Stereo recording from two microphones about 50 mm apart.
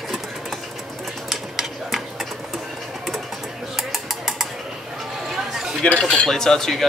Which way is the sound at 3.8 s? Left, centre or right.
Centre.